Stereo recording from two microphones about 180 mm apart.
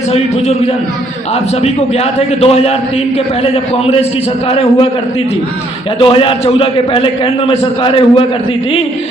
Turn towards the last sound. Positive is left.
turn(degrees=30)  # may be behind; listen again after turning